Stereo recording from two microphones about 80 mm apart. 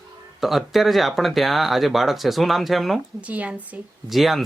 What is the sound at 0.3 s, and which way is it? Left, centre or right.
Speech, centre.